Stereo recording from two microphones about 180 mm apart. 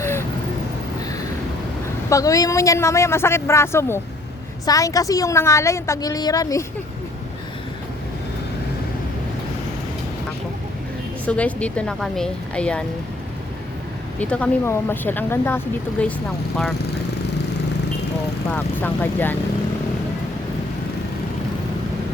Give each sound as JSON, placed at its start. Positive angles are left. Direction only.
{"t": 0.0, "sound": "vehicle", "side_deg": 15}
{"t": 2.0, "sound": "a woman's voice", "side_deg": 20}
{"t": 11.3, "sound": "a woman's voice", "side_deg": 5}
{"t": 14.2, "sound": "a woman's voice", "side_deg": 5}
{"t": 18.5, "sound": "a woman's voice", "side_deg": 10}